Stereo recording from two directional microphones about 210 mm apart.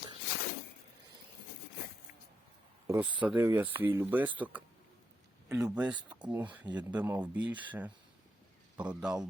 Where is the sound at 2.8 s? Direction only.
15° right (ahead or behind).